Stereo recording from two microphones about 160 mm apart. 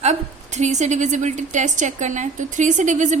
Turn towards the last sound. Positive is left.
turn(degrees=-50)  # may be behind; listen again after turning